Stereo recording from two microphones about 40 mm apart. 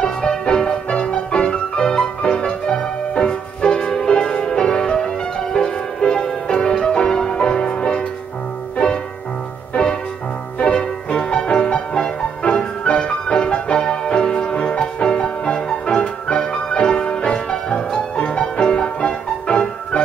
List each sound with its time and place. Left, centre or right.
0.0 s music: centre
10.6 s music: left